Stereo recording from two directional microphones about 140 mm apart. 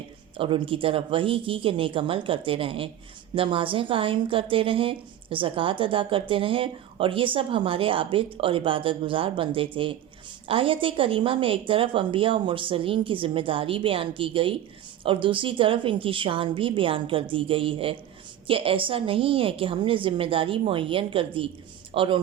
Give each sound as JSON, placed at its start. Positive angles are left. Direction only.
{"t": 0.3, "sound": "a woman's voice", "side_deg": -40}